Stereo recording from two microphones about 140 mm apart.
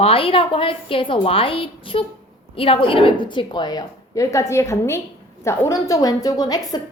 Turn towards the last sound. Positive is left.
turn(degrees=30)  # may be behind; listen again after turning